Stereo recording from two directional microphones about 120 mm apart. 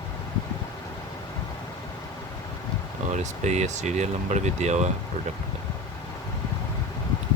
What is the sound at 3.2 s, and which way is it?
Speech, 75° right (ahead or behind).